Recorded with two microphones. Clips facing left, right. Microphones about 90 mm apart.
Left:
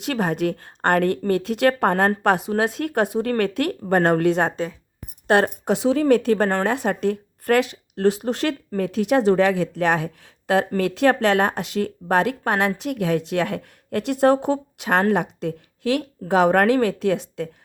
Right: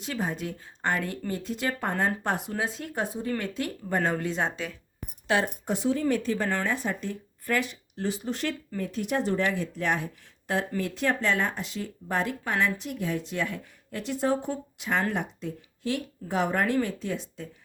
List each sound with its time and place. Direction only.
0.0 s speech: 70° left (ahead or behind)
1.3 s speech: 75° left (ahead or behind)
5.3 s speech: 80° left